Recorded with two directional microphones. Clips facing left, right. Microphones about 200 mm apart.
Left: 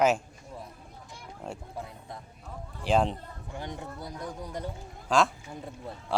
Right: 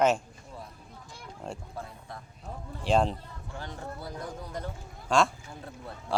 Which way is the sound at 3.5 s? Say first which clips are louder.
Left 3 dB; 20° left (ahead or behind).